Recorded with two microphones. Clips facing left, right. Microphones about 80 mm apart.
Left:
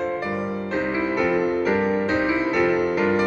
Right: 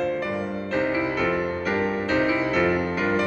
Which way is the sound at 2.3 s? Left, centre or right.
Centre.